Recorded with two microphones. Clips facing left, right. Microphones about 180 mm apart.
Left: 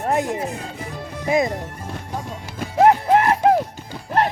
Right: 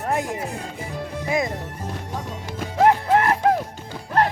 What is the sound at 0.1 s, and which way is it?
Speech, 20° left (ahead or behind).